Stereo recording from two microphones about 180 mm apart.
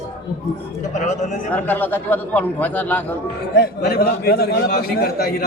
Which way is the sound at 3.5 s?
60° left (ahead or behind).